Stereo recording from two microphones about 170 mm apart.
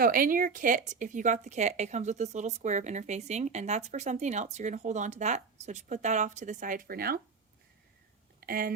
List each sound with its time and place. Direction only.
0.0 s a woman's voice: 55° right (ahead or behind)
8.4 s speech: 55° right (ahead or behind)